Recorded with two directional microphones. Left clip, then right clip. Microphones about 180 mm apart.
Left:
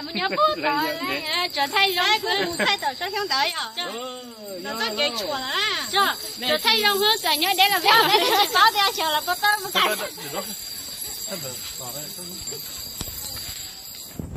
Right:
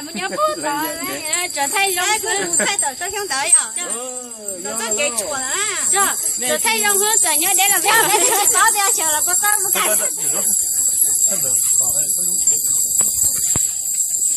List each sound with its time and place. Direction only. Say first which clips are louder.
0.1 s speech: right 1 dB; 5° left (ahead or behind)
4.6 s speech: right 3 dB; 40° right (ahead or behind)
5.9 s speech: right 2 dB; 15° right (ahead or behind); by 8.4 s 5° left (ahead or behind)
8.5 s speech: right 1 dB; 10° right (ahead or behind)